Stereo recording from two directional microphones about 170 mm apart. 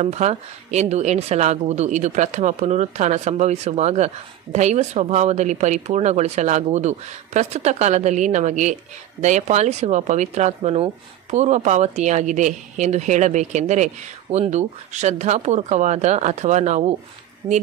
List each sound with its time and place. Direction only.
0.0 s speech: 40° right (ahead or behind)